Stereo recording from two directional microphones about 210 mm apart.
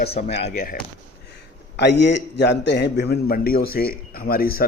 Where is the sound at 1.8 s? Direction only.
55° left (ahead or behind).